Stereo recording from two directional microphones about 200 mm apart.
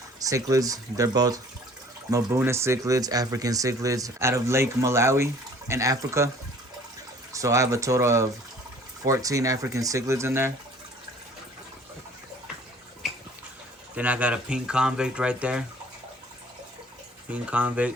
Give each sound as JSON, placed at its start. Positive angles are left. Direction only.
{"t": 0.2, "sound": "speech", "side_deg": -15}
{"t": 7.3, "sound": "speech", "side_deg": -15}
{"t": 13.9, "sound": "speech", "side_deg": -5}
{"t": 17.2, "sound": "speech", "side_deg": -5}